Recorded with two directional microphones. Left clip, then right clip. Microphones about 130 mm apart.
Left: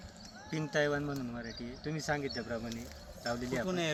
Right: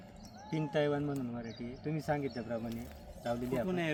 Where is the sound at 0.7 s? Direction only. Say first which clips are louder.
Left 1 dB; 25° right (ahead or behind).